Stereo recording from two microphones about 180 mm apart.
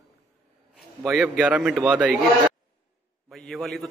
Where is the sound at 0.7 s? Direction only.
5° right (ahead or behind).